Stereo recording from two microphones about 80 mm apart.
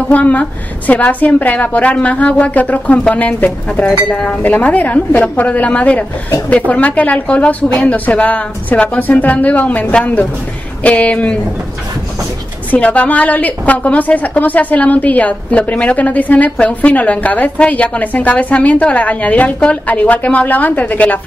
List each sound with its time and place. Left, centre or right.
0.1 s a woman's voice: centre
12.7 s a woman's voice: centre